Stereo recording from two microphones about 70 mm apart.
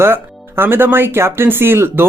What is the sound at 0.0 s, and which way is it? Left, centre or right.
Speech, right.